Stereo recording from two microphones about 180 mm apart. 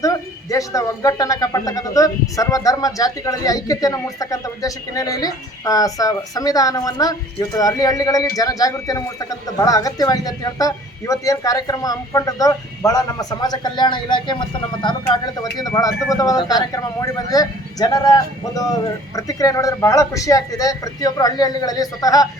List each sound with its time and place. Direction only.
0.0 s a man's voice: 20° left (ahead or behind)